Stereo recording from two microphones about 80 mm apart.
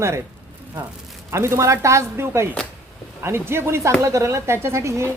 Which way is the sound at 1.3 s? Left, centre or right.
Right.